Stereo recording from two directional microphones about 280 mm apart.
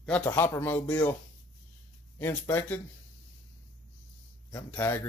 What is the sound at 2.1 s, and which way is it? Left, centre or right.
Speech, centre.